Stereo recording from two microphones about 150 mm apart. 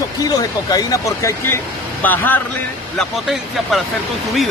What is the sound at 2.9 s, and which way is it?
Speech, centre (ahead or behind).